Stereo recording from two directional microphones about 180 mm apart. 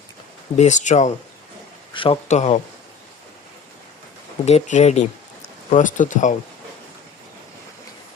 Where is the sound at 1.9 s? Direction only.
30° left (ahead or behind).